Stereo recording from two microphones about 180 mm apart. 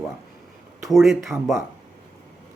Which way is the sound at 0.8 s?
Centre (ahead or behind).